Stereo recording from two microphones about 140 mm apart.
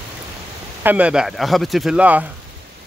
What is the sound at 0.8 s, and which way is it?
A man's voice, 10° right (ahead or behind).